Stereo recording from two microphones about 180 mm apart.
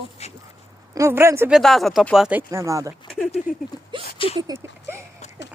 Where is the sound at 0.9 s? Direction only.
15° right (ahead or behind).